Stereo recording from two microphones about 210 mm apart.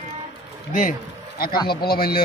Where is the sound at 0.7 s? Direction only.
40° left (ahead or behind).